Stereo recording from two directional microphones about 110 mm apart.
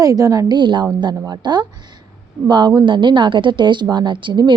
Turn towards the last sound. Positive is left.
turn(degrees=-45)  # may be behind; listen again after turning